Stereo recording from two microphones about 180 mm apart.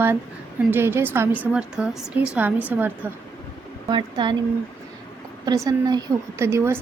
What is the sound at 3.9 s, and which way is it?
Speech, 25° right (ahead or behind).